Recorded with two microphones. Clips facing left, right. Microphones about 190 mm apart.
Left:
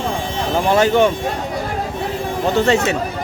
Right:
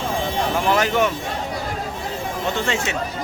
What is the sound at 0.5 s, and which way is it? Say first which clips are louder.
Speech: left 7 dB; 30° left (ahead or behind).